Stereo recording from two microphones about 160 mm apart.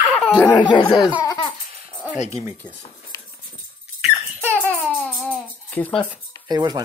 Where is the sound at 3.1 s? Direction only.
25° left (ahead or behind).